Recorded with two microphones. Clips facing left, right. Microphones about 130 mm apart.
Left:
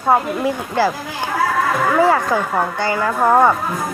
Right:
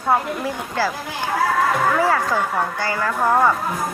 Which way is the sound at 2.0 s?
20° left (ahead or behind).